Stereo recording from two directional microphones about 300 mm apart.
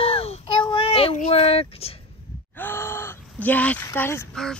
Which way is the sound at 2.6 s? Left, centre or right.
Centre.